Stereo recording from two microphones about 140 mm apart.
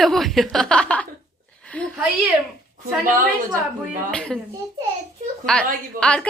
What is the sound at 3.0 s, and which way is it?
Speech, 75° right (ahead or behind).